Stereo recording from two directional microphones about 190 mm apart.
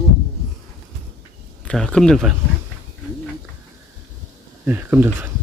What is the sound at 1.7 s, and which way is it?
Speech, 5° left (ahead or behind).